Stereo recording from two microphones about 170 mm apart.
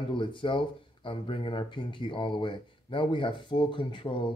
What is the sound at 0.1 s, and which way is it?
Speech, 30° left (ahead or behind).